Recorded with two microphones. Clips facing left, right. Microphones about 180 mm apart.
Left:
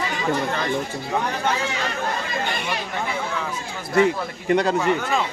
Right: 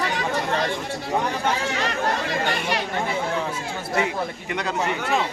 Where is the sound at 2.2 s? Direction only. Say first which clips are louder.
Right 2 dB; 75° right (ahead or behind).